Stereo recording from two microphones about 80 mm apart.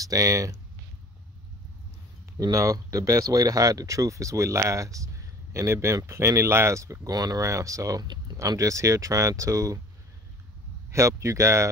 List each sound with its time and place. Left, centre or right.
0.0 s speech: right
2.3 s speech: right
10.9 s speech: right